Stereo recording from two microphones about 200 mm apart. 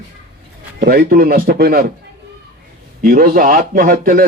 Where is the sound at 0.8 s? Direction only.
50° right (ahead or behind).